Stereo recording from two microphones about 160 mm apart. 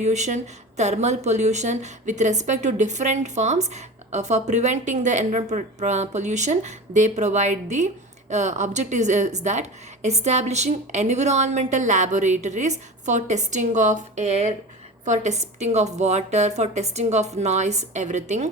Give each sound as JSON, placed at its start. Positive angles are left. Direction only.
{"t": 0.0, "sound": "a woman's voice", "side_deg": -45}